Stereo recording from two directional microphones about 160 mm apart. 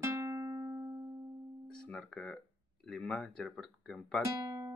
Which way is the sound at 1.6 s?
5° left (ahead or behind).